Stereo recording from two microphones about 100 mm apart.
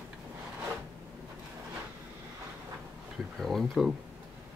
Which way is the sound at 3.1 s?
Centre (ahead or behind).